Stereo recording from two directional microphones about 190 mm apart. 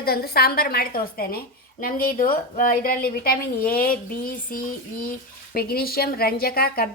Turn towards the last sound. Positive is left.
turn(degrees=55)  # may be behind; listen again after turning